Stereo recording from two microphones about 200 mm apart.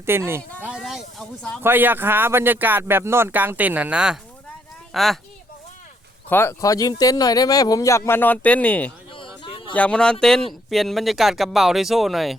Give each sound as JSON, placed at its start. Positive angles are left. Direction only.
{"t": 0.0, "sound": "speech", "side_deg": -10}
{"t": 1.6, "sound": "speech", "side_deg": -10}
{"t": 6.2, "sound": "speech", "side_deg": 10}
{"t": 9.1, "sound": "a sound", "side_deg": 25}
{"t": 9.7, "sound": "speech", "side_deg": 5}